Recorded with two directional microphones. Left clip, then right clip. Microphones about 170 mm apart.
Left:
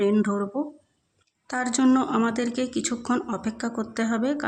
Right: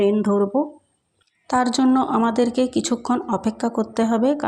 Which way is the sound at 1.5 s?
25° right (ahead or behind).